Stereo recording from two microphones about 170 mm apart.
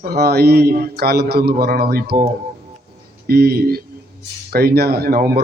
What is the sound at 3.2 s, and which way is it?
A man's voice, 65° right (ahead or behind).